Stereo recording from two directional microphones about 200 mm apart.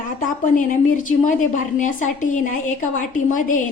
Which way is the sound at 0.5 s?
40° left (ahead or behind).